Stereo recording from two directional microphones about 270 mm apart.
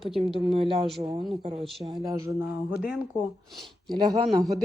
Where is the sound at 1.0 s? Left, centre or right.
Right.